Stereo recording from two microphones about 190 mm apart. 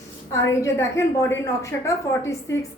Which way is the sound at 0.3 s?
15° left (ahead or behind).